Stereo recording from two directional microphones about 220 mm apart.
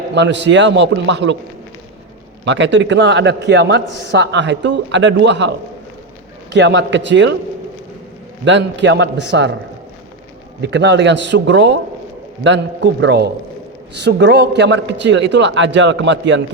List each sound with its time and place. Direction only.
0.1 s a man's voice: 55° right (ahead or behind)
2.4 s a man's voice: 55° right (ahead or behind)
8.4 s a man's voice: 55° right (ahead or behind)
10.6 s a man's voice: 50° right (ahead or behind)